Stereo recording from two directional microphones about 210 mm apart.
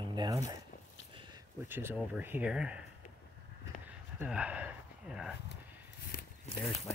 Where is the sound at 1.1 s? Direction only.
20° right (ahead or behind).